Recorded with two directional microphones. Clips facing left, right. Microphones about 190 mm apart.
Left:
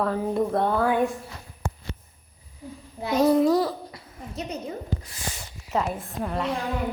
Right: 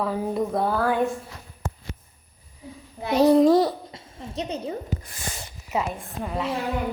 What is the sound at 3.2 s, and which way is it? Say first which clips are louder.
Babbling: right 3 dB; 35° right (ahead or behind).